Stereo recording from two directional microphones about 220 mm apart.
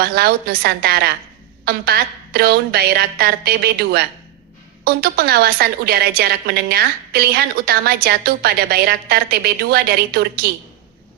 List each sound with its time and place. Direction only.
0.0 s a woman's voice: 45° right (ahead or behind)